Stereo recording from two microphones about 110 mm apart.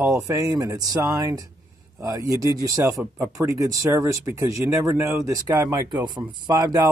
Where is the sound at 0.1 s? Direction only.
30° right (ahead or behind).